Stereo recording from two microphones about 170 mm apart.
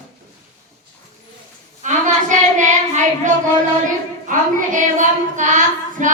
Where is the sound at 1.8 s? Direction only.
45° right (ahead or behind).